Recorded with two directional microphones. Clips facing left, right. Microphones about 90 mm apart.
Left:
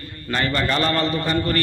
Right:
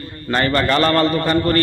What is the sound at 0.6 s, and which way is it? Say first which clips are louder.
Speech: right 6 dB; 70° right (ahead or behind).